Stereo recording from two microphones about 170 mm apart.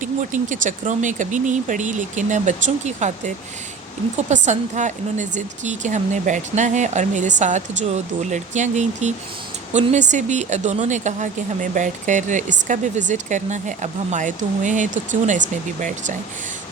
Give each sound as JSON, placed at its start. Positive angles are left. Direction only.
{"t": 0.0, "sound": "a woman's voice", "side_deg": -50}